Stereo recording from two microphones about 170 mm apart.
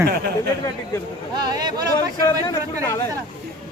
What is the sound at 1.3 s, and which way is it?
Speech, 25° right (ahead or behind).